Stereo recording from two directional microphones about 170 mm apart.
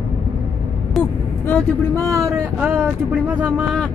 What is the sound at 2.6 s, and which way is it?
Speech, 10° right (ahead or behind).